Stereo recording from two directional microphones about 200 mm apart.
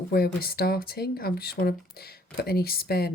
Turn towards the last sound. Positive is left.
turn(degrees=50)  # may be behind; listen again after turning